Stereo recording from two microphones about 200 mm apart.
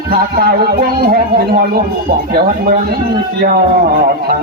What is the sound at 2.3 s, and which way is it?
Speech, 50° right (ahead or behind).